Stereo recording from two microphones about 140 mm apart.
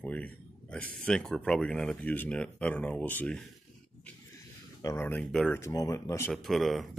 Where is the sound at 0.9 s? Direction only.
5° left (ahead or behind).